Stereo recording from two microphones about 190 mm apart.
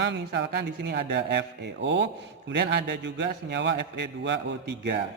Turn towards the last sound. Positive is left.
turn(degrees=-65)  # may be behind; listen again after turning